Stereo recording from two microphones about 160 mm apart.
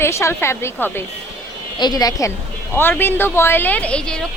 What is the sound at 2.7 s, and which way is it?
A woman's voice, 15° left (ahead or behind).